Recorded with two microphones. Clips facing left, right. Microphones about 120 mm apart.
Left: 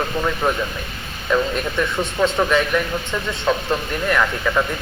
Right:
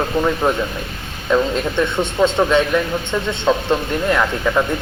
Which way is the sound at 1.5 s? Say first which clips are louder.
Right 3 dB; 25° right (ahead or behind).